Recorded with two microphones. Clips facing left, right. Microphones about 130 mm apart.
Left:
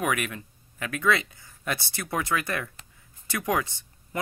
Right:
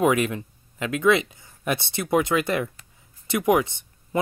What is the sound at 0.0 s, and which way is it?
Speech, 25° right (ahead or behind).